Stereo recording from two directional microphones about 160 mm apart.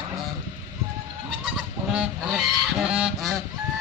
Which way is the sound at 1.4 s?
5° right (ahead or behind).